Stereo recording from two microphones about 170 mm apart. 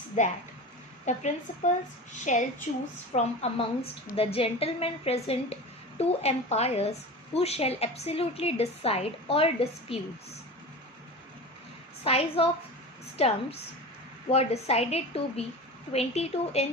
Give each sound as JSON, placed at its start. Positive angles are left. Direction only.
{"t": 0.2, "sound": "a child's voice", "side_deg": 45}
{"t": 12.0, "sound": "a woman's voice", "side_deg": 35}